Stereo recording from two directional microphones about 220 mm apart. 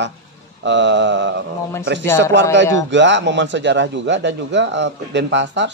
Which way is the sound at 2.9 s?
55° right (ahead or behind).